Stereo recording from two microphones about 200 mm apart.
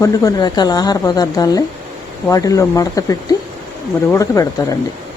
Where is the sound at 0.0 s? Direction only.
15° left (ahead or behind).